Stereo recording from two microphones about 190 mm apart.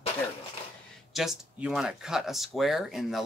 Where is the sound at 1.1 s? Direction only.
Centre (ahead or behind).